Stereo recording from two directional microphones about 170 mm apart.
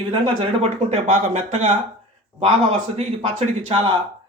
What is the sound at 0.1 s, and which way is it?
Speech, 35° right (ahead or behind).